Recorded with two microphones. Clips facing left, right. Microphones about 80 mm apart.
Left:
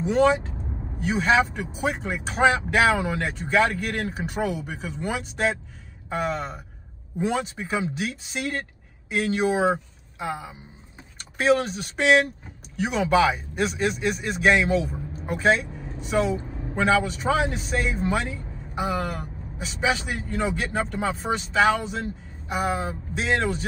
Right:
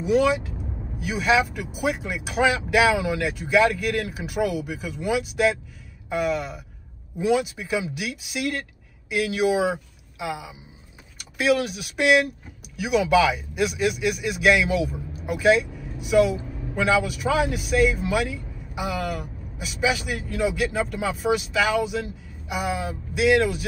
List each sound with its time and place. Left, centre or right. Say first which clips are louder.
0.1 s speech: even; left
11.3 s speech: left 1 dB; left